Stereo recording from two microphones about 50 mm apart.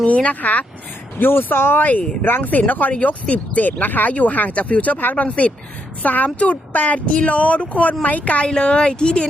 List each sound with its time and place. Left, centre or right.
0.0 s speech: left
1.2 s speech: left
1.8 s speech: left